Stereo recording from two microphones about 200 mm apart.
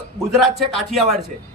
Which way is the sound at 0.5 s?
Centre (ahead or behind).